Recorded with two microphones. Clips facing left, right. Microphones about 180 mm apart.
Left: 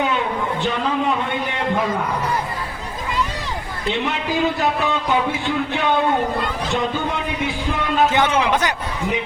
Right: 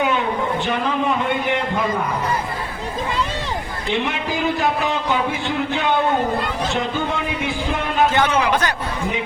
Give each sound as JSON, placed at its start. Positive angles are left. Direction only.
{"t": 8.1, "sound": "a man's voice", "side_deg": 20}